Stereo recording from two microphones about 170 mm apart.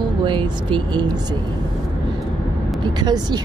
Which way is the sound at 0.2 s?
30° right (ahead or behind).